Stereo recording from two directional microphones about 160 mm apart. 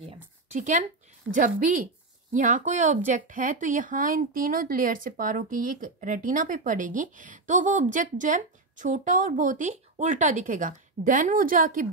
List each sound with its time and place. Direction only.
0.6 s a woman's voice: 50° right (ahead or behind)